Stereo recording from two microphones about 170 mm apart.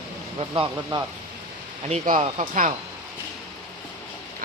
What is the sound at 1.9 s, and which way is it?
Speech, 45° right (ahead or behind).